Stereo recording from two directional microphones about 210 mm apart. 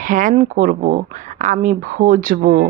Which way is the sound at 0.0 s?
40° right (ahead or behind).